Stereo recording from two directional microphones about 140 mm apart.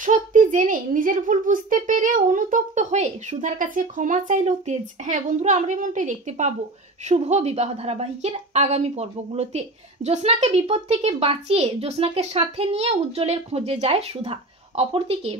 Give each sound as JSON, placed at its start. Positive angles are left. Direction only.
{"t": 0.0, "sound": "a woman's voice", "side_deg": -65}